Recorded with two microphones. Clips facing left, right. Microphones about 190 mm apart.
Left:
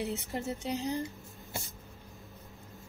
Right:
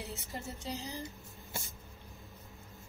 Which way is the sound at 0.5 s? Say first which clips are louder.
Left 8 dB; 60° left (ahead or behind).